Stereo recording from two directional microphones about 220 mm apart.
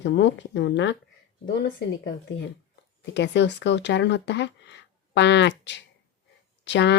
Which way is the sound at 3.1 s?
50° left (ahead or behind).